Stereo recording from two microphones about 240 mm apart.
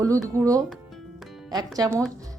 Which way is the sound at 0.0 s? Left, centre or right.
Centre.